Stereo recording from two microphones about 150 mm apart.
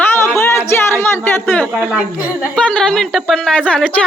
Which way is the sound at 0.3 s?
15° left (ahead or behind).